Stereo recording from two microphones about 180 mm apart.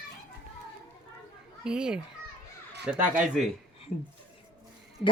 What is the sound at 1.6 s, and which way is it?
Speech, 5° right (ahead or behind).